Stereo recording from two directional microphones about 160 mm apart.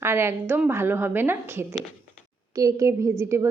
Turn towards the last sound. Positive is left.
turn(degrees=-15)  # may be behind; listen again after turning